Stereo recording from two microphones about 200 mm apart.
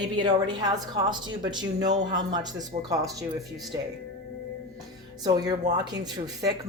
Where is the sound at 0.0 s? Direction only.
20° right (ahead or behind).